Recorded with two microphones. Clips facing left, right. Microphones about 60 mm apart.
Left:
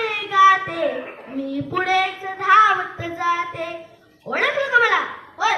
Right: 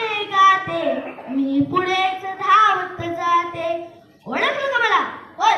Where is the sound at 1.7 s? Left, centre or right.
Left.